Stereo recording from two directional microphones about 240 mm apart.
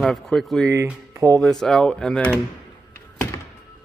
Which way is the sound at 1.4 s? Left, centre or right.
Centre.